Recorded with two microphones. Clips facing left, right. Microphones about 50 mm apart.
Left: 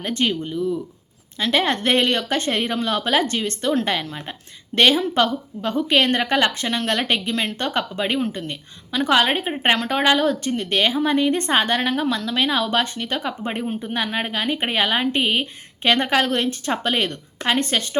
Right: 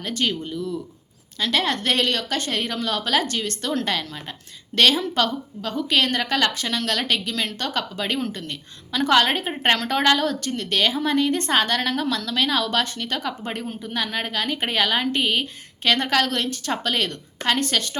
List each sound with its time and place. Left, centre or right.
0.0 s speech: left
0.3 s speech: centre